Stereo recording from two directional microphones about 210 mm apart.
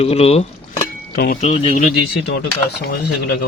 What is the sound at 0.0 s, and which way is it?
Speech, 30° left (ahead or behind).